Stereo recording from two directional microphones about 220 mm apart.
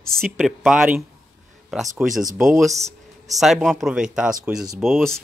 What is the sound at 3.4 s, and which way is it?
Speech, centre (ahead or behind).